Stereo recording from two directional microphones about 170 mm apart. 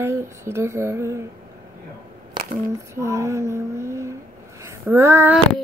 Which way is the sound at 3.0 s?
15° right (ahead or behind).